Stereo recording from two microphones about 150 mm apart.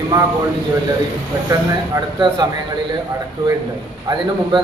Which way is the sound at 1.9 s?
25° right (ahead or behind).